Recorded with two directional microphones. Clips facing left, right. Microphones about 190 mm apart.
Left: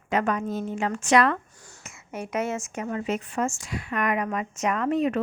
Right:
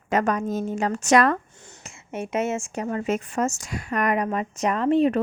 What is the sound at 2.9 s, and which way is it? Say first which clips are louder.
A woman's voice: right 3 dB; 45° right (ahead or behind).